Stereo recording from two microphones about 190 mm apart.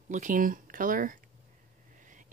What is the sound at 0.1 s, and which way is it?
Speech, 45° right (ahead or behind).